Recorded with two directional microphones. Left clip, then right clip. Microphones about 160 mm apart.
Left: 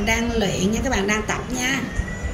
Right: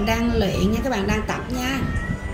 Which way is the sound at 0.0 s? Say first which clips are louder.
Even; 55° right (ahead or behind).